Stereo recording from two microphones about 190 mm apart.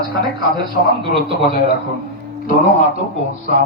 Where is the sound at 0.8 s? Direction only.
60° left (ahead or behind).